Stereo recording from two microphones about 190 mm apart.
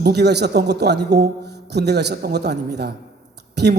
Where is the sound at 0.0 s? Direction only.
60° right (ahead or behind).